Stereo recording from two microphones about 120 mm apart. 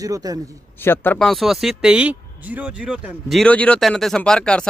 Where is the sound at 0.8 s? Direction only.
15° left (ahead or behind).